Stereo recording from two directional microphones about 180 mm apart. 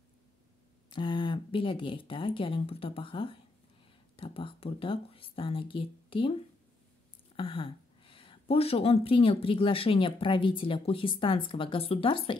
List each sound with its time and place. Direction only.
0.8 s speech: 25° left (ahead or behind)
7.3 s speech: 30° left (ahead or behind)